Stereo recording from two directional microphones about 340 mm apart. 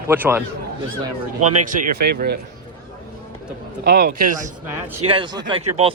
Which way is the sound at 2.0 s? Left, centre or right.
Right.